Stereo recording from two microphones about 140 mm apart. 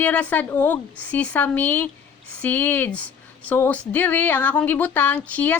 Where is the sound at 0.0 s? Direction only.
10° left (ahead or behind).